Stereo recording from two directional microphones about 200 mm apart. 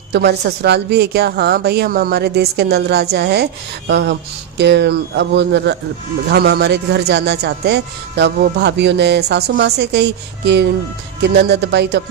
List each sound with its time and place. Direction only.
0.1 s a woman's voice: 55° right (ahead or behind)